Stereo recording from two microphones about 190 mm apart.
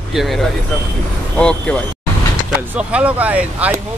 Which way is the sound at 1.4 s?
5° left (ahead or behind).